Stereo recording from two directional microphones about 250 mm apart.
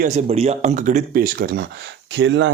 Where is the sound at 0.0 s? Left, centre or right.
Right.